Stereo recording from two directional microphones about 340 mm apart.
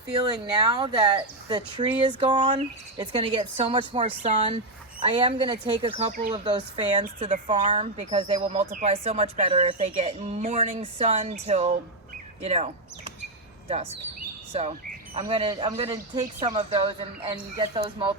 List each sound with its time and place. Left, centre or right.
0.5 s speech: centre
15.1 s speech: centre